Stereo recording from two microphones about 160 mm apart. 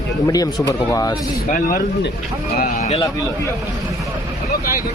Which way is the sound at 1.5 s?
55° left (ahead or behind).